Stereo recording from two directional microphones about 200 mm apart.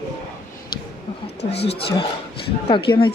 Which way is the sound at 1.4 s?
55° left (ahead or behind).